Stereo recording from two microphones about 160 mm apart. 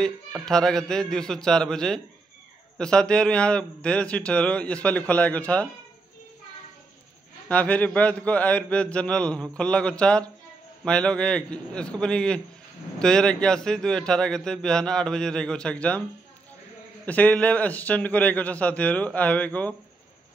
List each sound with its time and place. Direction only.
0.5 s a man's voice: 5° left (ahead or behind)
7.4 s a man's voice: 10° left (ahead or behind)
17.0 s a man's voice: 10° left (ahead or behind)